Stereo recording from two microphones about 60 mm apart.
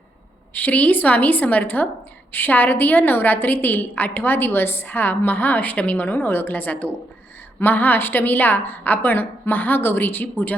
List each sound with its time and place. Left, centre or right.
0.5 s a woman's voice: left